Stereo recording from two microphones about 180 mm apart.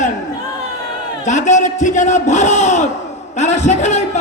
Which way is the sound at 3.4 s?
40° left (ahead or behind).